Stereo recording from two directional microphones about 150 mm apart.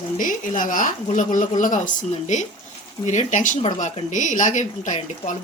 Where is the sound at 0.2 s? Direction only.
65° left (ahead or behind).